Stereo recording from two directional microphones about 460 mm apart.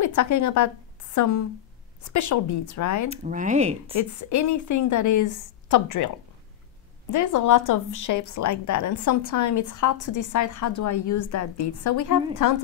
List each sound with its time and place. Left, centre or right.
0.0 s a woman's voice: left
3.1 s speech: centre
3.9 s a woman's voice: left
7.1 s a woman's voice: left